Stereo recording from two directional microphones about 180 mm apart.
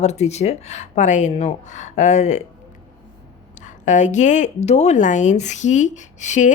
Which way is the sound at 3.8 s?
40° left (ahead or behind).